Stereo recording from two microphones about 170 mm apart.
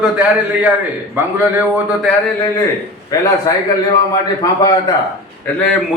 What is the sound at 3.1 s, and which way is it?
Speech, 20° left (ahead or behind).